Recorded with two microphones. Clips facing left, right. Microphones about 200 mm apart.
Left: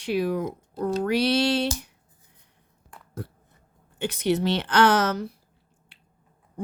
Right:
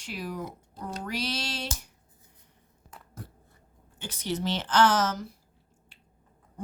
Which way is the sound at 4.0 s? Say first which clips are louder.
Left 8 dB; 65° left (ahead or behind).